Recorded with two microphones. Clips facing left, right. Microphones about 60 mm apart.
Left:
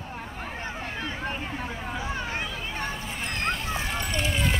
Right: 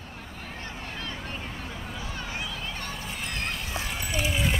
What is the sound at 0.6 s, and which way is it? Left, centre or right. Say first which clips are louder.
Vehicle: left 3 dB; left.